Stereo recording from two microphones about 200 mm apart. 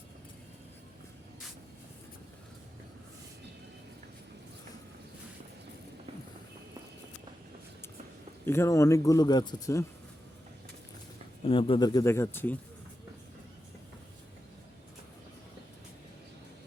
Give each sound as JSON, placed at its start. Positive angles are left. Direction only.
{"t": 8.4, "sound": "a man's voice", "side_deg": 15}
{"t": 11.4, "sound": "a man's voice", "side_deg": 25}